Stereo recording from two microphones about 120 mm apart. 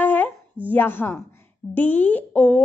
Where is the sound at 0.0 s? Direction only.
15° left (ahead or behind).